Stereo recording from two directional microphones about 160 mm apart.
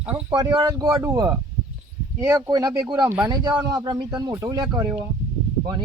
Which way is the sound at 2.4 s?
25° right (ahead or behind).